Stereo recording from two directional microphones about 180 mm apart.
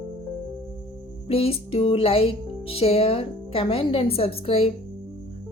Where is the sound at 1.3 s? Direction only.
35° left (ahead or behind).